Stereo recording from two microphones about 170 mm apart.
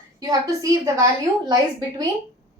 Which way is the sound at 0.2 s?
20° right (ahead or behind).